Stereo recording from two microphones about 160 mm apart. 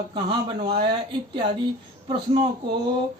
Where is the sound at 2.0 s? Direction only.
35° right (ahead or behind).